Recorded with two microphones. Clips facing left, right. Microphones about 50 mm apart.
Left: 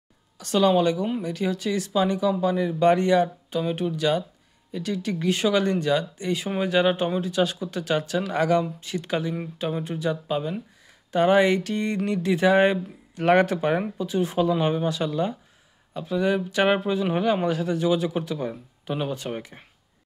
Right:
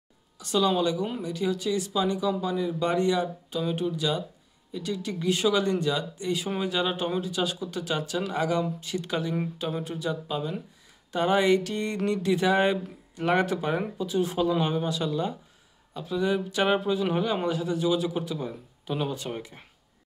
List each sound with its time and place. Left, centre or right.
0.4 s speech: left